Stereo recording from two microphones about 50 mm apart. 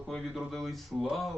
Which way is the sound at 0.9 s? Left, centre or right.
Right.